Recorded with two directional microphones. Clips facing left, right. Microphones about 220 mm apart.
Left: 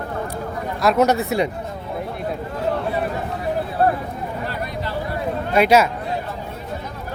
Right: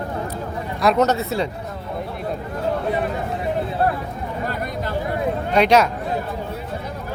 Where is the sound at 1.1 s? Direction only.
15° left (ahead or behind).